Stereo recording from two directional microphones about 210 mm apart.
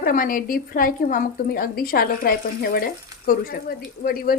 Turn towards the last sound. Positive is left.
turn(degrees=45)  # may be behind; listen again after turning